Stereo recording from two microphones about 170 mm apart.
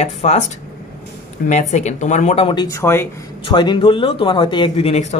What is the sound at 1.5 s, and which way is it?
Speech, 45° left (ahead or behind).